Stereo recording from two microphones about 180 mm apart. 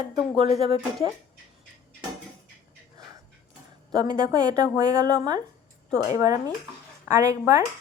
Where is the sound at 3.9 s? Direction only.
20° right (ahead or behind).